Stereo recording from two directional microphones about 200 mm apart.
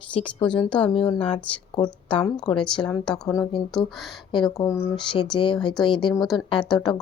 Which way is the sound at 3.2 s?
20° left (ahead or behind).